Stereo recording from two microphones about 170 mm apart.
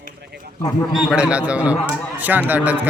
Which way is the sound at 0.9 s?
Centre (ahead or behind).